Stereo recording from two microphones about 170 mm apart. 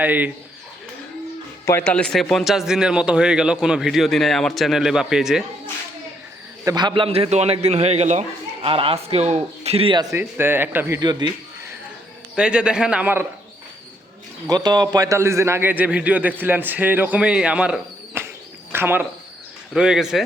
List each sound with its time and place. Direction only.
0.0 s a man's voice: 10° right (ahead or behind)
1.6 s speech: 10° left (ahead or behind)
6.7 s a man's voice: 25° right (ahead or behind)
11.0 s a man's voice: 25° right (ahead or behind)
12.4 s speech: 5° right (ahead or behind)
14.4 s a man's voice: 25° right (ahead or behind); by 20.2 s 5° right (ahead or behind)